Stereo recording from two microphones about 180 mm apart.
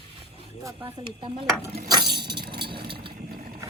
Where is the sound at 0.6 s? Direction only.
25° right (ahead or behind).